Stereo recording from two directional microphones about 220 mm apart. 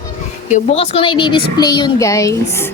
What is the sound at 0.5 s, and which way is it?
A child's voice, 30° left (ahead or behind).